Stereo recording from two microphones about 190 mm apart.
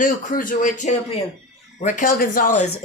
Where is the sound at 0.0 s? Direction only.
45° left (ahead or behind).